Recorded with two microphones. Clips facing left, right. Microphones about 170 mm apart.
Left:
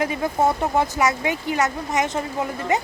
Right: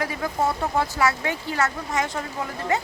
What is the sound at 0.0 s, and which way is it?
Speech, 20° left (ahead or behind).